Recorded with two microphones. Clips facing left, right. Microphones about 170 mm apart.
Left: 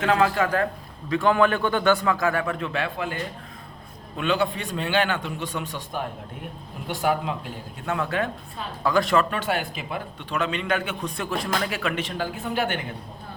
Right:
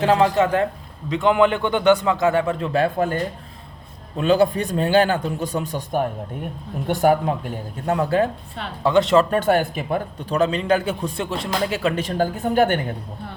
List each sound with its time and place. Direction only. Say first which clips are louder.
0.0 s a man's voice: right 4 dB; 30° right (ahead or behind); by 7.9 s 45° right (ahead or behind)
7.9 s a man's voice: right 7 dB; 35° right (ahead or behind)
8.8 s a man's voice: right 5 dB; 25° right (ahead or behind)
9.3 s a man's voice: right 8 dB; 45° right (ahead or behind)